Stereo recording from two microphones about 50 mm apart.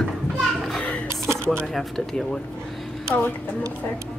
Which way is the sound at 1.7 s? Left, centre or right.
Centre.